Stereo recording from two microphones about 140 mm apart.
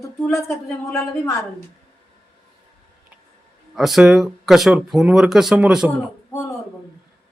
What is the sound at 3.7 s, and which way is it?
Speech, centre (ahead or behind).